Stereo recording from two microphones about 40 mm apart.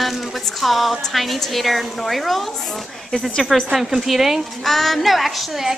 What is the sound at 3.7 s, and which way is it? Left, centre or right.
A woman's voice, centre.